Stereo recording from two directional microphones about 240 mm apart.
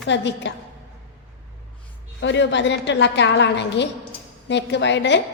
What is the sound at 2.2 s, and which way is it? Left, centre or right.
A woman's voice, left.